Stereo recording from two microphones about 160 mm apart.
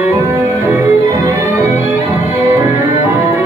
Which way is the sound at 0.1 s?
15° right (ahead or behind).